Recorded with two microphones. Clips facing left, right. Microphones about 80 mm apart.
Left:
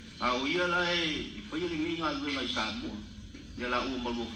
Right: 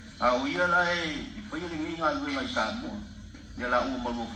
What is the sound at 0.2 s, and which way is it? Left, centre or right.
A man's voice, right.